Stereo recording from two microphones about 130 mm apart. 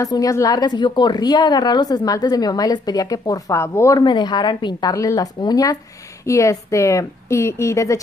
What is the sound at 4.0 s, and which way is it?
Speech, 35° left (ahead or behind).